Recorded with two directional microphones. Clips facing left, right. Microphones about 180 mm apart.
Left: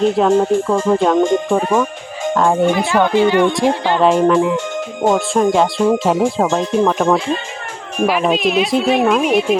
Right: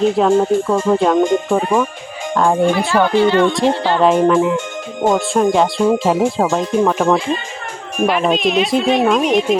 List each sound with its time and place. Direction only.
0.1 s speech: centre (ahead or behind)
2.7 s speech: 15° left (ahead or behind)
4.0 s speech: centre (ahead or behind)